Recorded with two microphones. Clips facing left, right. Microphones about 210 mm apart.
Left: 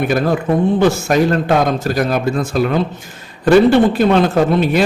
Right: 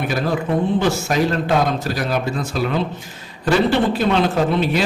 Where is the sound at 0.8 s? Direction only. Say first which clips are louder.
Left 5 dB; 50° left (ahead or behind).